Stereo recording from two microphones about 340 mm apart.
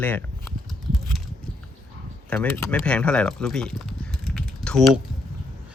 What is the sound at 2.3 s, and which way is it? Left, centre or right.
Speech, centre.